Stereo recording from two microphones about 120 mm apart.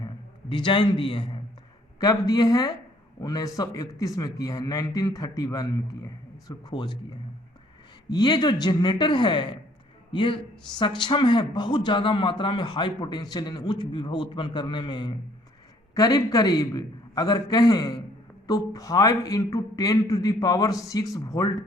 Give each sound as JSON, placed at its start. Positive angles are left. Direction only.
{"t": 0.0, "sound": "a man's voice", "side_deg": 40}
{"t": 2.0, "sound": "speech", "side_deg": 30}
{"t": 8.1, "sound": "speech", "side_deg": 35}